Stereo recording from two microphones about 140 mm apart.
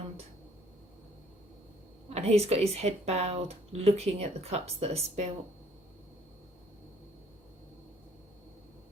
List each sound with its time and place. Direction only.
2.0 s speech: 50° right (ahead or behind)